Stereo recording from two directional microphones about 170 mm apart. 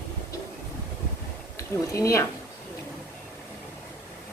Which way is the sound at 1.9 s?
20° left (ahead or behind).